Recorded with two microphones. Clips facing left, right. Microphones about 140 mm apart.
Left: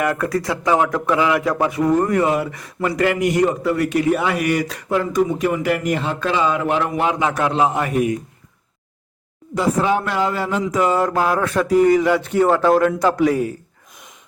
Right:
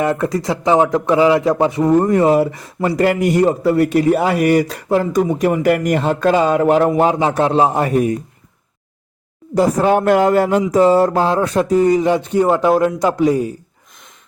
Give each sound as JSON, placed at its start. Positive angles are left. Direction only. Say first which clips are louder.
{"t": 0.0, "sound": "a man's voice", "louder": "right 3 dB", "side_deg": -25}
{"t": 9.6, "sound": "a man's voice", "louder": "right 5 dB", "side_deg": -50}
{"t": 10.7, "sound": "speech", "louder": "right 5 dB", "side_deg": -35}